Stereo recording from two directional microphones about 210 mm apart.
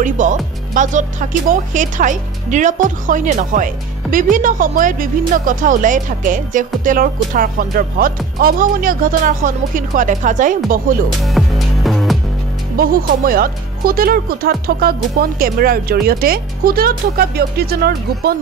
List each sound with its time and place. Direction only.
0.0 s speech: 35° right (ahead or behind)
11.1 s music: centre (ahead or behind)
12.7 s speech: 45° right (ahead or behind)